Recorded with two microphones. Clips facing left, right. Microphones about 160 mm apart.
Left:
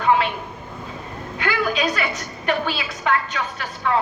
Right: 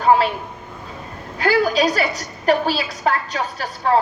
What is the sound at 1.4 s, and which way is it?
A woman's voice, 35° right (ahead or behind).